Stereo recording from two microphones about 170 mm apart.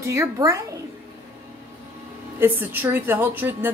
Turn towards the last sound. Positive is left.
turn(degrees=-10)  # may be behind; listen again after turning